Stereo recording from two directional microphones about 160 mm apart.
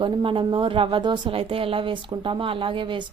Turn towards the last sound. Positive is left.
turn(degrees=-30)  # may be behind; listen again after turning